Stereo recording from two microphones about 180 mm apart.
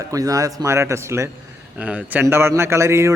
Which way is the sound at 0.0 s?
20° right (ahead or behind).